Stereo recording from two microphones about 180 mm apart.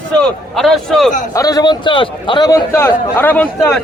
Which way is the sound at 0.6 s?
Centre (ahead or behind).